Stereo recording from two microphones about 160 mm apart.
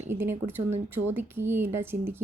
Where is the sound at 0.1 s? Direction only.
15° right (ahead or behind).